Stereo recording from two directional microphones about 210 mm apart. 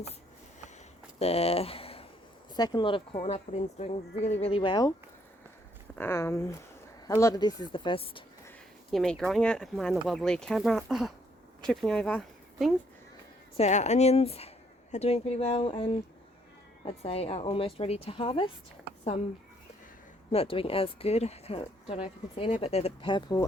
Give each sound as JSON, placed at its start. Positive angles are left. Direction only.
{"t": 1.2, "sound": "speech", "side_deg": 30}
{"t": 6.0, "sound": "speech", "side_deg": 10}
{"t": 8.9, "sound": "speech", "side_deg": 0}
{"t": 13.6, "sound": "speech", "side_deg": 35}
{"t": 20.3, "sound": "speech", "side_deg": 25}